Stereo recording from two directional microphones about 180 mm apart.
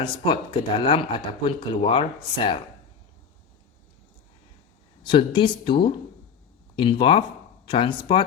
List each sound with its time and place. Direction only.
0.0 s speech: 30° left (ahead or behind)
5.0 s speech: 30° left (ahead or behind)